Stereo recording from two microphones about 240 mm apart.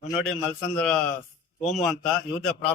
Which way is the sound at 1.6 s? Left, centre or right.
Left.